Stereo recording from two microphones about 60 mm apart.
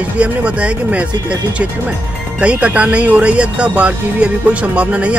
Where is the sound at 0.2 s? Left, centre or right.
Centre.